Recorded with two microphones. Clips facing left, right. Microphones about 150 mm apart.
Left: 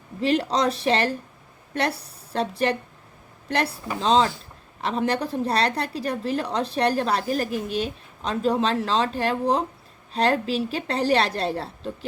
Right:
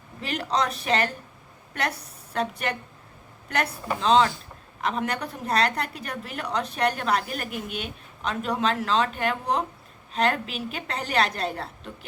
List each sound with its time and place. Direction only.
0.2 s a woman's voice: 30° left (ahead or behind)